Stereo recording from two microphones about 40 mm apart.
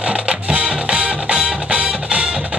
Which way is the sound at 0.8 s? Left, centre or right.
Right.